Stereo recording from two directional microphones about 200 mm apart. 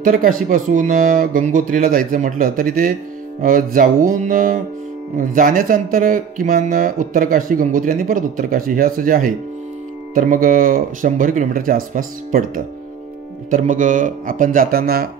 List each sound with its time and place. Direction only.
0.0 s speech: 45° right (ahead or behind)